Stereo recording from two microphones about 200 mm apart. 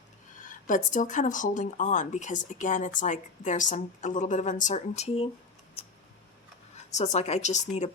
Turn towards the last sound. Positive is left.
turn(degrees=35)  # may be behind; listen again after turning